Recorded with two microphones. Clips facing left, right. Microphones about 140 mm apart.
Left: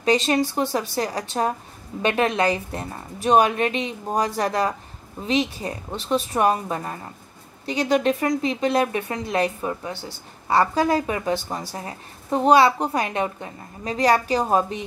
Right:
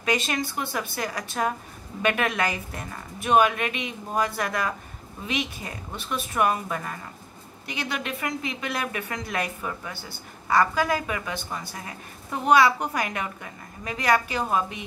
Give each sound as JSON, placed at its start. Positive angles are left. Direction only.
{"t": 0.0, "sound": "a woman's voice", "side_deg": 30}